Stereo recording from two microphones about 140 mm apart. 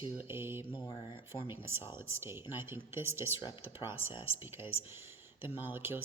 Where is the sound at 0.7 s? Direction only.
35° left (ahead or behind).